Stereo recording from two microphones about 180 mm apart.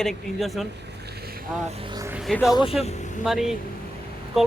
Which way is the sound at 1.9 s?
15° right (ahead or behind).